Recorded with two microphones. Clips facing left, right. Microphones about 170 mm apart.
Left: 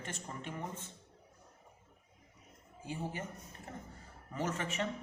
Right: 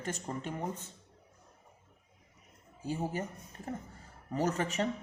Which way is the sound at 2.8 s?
40° right (ahead or behind).